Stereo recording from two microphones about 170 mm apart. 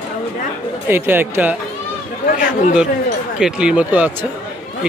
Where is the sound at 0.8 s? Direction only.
10° right (ahead or behind).